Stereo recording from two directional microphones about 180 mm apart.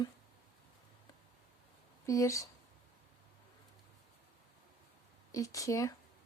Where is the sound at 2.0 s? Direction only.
20° left (ahead or behind).